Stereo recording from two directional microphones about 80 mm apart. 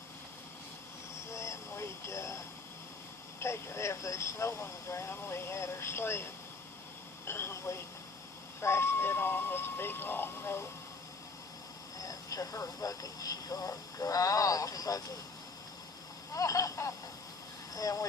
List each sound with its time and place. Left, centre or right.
1.3 s a sound: left
3.4 s speech: left
7.3 s speech: left
11.9 s speech: left
16.3 s speech: left